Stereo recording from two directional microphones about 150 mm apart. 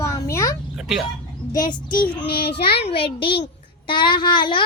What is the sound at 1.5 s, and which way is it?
Speech, 30° left (ahead or behind).